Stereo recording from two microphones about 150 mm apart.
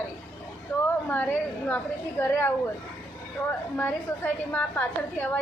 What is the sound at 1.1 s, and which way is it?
A woman's voice, 10° left (ahead or behind).